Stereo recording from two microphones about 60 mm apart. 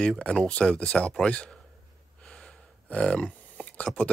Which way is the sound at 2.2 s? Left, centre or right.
Centre.